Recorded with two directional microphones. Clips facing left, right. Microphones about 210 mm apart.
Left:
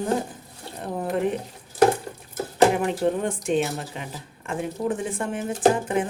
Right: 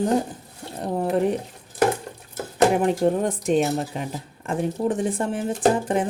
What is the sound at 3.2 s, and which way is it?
Speech, 40° right (ahead or behind).